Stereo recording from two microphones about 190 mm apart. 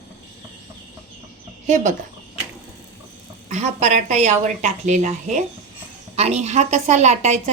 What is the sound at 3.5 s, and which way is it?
A woman's voice, 35° right (ahead or behind).